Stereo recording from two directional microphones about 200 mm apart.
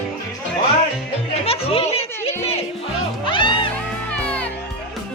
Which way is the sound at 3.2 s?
25° left (ahead or behind).